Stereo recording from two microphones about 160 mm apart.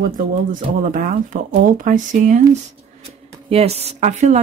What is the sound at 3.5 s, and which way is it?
Speech, 40° right (ahead or behind).